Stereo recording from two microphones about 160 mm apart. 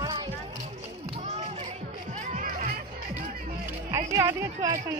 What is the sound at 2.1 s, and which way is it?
Music, 50° right (ahead or behind).